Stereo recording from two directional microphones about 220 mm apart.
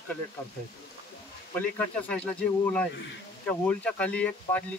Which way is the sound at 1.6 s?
5° left (ahead or behind).